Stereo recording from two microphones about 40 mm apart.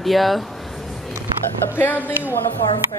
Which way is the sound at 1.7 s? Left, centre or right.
Left.